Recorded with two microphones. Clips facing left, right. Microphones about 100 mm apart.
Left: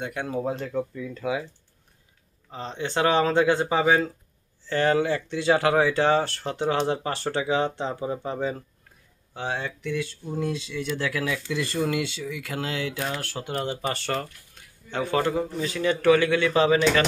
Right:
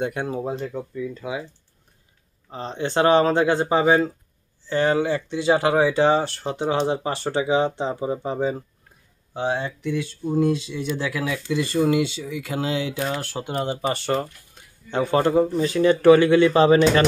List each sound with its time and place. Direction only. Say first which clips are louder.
0.0 s speech: right 5 dB; 25° right (ahead or behind)
0.4 s speech: even; 10° right (ahead or behind)
2.8 s speech: right 5 dB; 40° right (ahead or behind)
4.6 s speech: right 2 dB; 20° right (ahead or behind)
14.2 s speech: right 5 dB; 25° right (ahead or behind)